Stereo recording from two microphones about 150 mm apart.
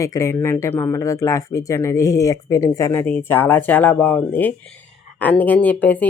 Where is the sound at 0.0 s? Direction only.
20° left (ahead or behind).